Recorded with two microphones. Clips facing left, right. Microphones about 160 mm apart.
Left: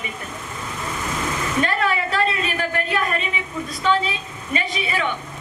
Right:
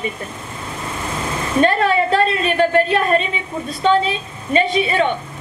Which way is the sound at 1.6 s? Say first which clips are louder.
Right 8 dB; 30° right (ahead or behind).